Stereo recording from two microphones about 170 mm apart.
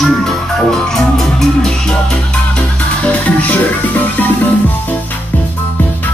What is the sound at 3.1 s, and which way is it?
Music, 10° left (ahead or behind).